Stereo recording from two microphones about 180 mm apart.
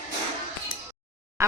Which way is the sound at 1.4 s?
15° right (ahead or behind).